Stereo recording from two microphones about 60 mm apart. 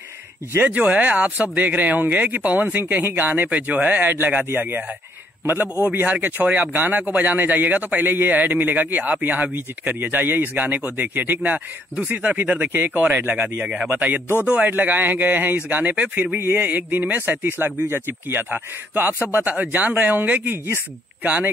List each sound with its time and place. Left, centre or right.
0.6 s a man's voice: right
6.4 s a man's voice: right
13.6 s a man's voice: right
16.3 s speech: right
16.6 s speech: right
19.5 s a man's voice: right